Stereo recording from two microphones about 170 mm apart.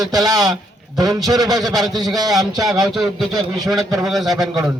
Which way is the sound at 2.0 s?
20° right (ahead or behind).